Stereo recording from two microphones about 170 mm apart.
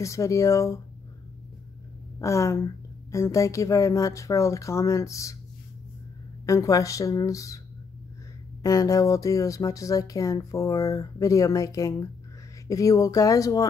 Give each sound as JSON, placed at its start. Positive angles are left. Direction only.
{"t": 0.0, "sound": "a woman's voice", "side_deg": 20}
{"t": 2.1, "sound": "a woman's voice", "side_deg": 15}
{"t": 6.4, "sound": "speech", "side_deg": 20}
{"t": 8.6, "sound": "speech", "side_deg": 20}